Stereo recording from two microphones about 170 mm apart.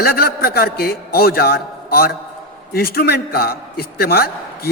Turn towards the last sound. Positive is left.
turn(degrees=65)  # may be behind; listen again after turning